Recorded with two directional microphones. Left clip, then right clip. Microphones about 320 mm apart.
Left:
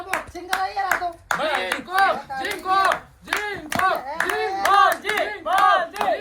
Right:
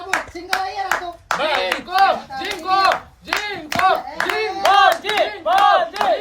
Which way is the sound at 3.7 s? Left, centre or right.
Centre.